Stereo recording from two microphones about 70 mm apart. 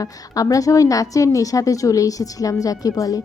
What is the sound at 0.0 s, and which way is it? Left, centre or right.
A woman's voice, left.